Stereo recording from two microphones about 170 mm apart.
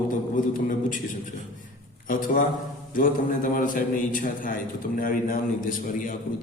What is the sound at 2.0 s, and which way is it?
Speech, 50° left (ahead or behind).